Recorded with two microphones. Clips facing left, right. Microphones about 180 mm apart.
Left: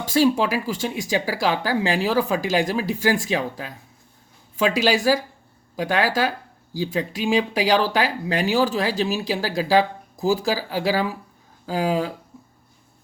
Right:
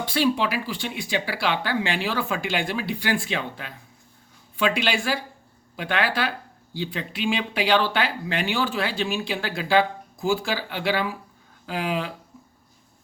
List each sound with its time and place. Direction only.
0.0 s speech: 45° left (ahead or behind)